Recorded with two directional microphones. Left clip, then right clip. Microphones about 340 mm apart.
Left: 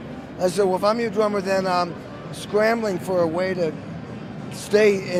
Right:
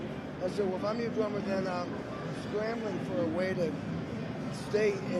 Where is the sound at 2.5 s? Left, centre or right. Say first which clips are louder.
Left 15 dB; left.